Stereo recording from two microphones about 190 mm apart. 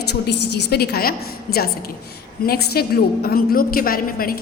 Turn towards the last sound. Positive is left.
turn(degrees=50)  # may be behind; listen again after turning